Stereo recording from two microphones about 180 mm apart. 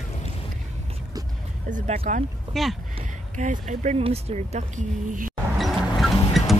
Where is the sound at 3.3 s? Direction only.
40° right (ahead or behind).